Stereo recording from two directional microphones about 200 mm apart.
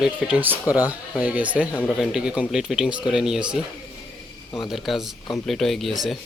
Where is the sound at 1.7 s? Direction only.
5° left (ahead or behind).